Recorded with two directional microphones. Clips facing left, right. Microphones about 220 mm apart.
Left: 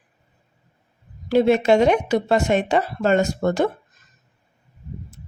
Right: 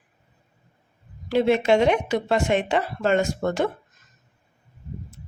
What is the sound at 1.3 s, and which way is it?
Speech, 40° left (ahead or behind).